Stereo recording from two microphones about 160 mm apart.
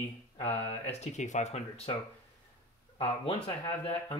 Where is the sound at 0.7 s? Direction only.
45° left (ahead or behind).